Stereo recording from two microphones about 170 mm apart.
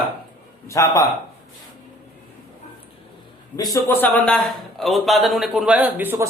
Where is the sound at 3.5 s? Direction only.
20° left (ahead or behind).